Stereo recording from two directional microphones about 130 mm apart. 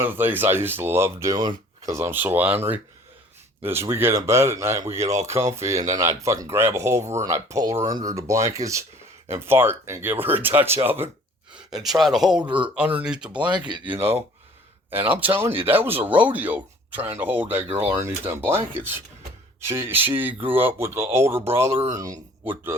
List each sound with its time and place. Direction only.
0.0 s speech: 15° right (ahead or behind)
5.0 s speech: 60° right (ahead or behind)
5.3 s speech: 25° right (ahead or behind)
11.7 s speech: centre (ahead or behind); by 22.2 s 30° right (ahead or behind)